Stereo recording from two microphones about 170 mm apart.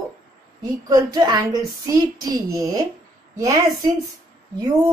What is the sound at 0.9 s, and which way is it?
A woman's voice, 25° right (ahead or behind).